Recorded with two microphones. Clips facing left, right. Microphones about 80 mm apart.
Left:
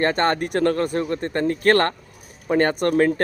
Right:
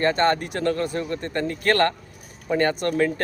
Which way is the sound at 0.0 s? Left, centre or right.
Left.